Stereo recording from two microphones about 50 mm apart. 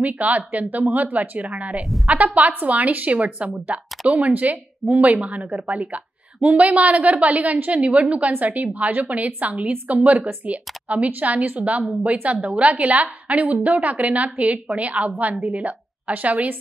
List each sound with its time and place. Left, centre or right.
0.0 s a woman's voice: right